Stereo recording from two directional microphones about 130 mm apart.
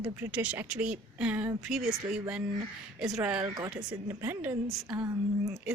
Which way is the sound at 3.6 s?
20° right (ahead or behind).